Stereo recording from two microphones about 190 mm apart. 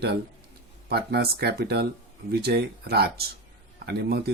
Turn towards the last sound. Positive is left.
turn(degrees=-55)  # may be behind; listen again after turning